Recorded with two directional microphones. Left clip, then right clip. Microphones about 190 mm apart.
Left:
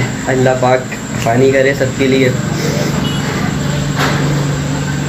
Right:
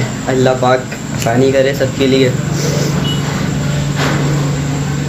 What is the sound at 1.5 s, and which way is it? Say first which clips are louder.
Speech: left 1 dB; 5° right (ahead or behind).